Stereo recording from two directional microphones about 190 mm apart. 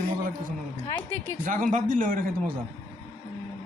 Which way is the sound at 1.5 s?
45° right (ahead or behind).